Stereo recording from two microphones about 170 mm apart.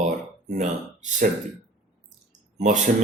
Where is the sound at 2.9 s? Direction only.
50° right (ahead or behind).